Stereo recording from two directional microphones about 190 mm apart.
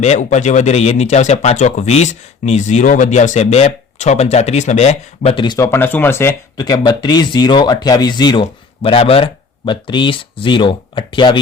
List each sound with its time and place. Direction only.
0.0 s speech: 40° left (ahead or behind)